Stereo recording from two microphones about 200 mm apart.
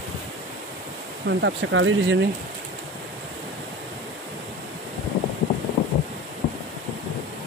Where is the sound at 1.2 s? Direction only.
70° right (ahead or behind).